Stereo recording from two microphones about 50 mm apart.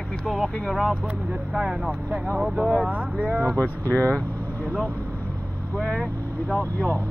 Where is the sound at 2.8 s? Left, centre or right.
Right.